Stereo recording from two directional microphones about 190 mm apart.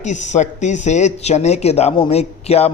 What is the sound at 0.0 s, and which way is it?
Speech, 40° left (ahead or behind).